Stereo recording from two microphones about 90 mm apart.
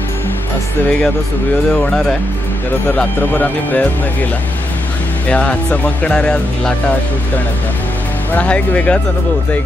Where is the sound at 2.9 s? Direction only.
20° left (ahead or behind).